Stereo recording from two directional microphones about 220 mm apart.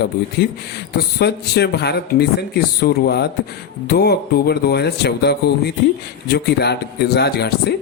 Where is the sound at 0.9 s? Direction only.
50° left (ahead or behind).